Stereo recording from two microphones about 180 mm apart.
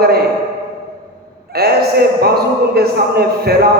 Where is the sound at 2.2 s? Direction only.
60° right (ahead or behind).